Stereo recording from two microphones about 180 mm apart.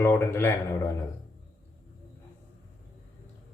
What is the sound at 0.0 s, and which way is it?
Speech, 15° left (ahead or behind).